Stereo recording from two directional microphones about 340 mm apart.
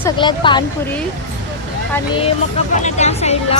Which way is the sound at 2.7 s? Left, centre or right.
Centre.